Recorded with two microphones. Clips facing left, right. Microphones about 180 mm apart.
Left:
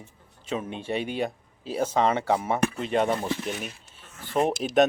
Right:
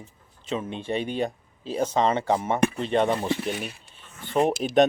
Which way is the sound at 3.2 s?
15° right (ahead or behind).